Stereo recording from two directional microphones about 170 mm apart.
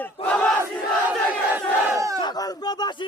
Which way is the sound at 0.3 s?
5° left (ahead or behind).